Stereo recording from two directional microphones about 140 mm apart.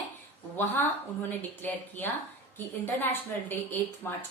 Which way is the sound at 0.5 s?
15° left (ahead or behind).